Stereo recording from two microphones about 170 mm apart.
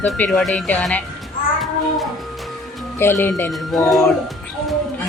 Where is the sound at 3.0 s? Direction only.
15° left (ahead or behind).